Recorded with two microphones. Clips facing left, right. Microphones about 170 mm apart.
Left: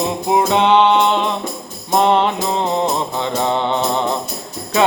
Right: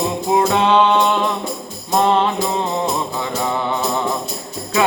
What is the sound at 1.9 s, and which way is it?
Mantra, 20° left (ahead or behind).